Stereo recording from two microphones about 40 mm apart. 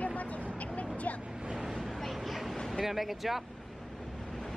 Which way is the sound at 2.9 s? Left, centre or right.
Centre.